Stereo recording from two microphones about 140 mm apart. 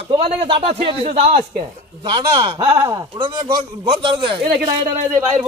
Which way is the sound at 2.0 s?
35° right (ahead or behind).